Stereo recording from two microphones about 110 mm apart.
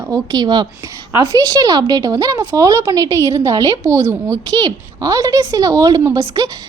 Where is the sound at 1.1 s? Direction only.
25° right (ahead or behind).